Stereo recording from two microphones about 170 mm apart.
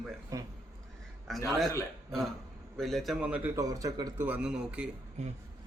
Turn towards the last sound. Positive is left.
turn(degrees=-5)  # may be behind; listen again after turning